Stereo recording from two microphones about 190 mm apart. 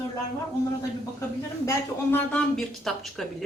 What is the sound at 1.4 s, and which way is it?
Speech, 15° left (ahead or behind).